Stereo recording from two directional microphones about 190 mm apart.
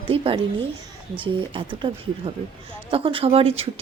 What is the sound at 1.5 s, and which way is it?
Speech, 25° right (ahead or behind).